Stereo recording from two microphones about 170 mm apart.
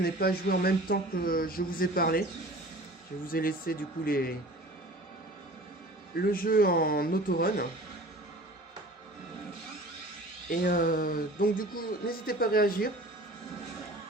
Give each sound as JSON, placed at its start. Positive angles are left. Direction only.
{"t": 0.0, "sound": "speech", "side_deg": 65}
{"t": 3.2, "sound": "speech", "side_deg": 60}
{"t": 6.2, "sound": "speech", "side_deg": 55}
{"t": 10.5, "sound": "speech", "side_deg": 55}